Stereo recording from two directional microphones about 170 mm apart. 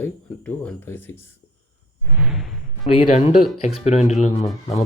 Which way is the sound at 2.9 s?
35° left (ahead or behind).